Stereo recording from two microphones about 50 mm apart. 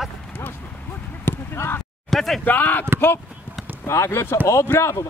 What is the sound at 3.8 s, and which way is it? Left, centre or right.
Speech, left.